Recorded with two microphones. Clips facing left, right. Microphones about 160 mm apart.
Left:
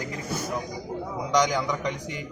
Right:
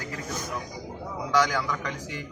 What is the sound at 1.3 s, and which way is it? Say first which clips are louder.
Speech: left 1 dB; 20° left (ahead or behind).